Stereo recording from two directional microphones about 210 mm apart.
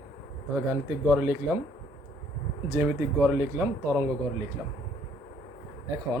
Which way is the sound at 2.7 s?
10° right (ahead or behind).